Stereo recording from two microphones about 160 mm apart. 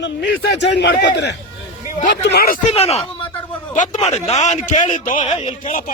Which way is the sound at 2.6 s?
40° left (ahead or behind).